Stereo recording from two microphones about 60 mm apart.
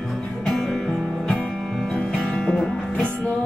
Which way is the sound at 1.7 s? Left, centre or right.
Centre.